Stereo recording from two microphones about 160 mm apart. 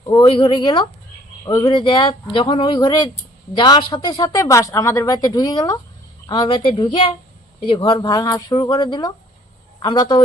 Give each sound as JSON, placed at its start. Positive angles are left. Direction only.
{"t": 0.3, "sound": "speech", "side_deg": 35}
{"t": 2.3, "sound": "a sound", "side_deg": 30}
{"t": 3.6, "sound": "speech", "side_deg": 30}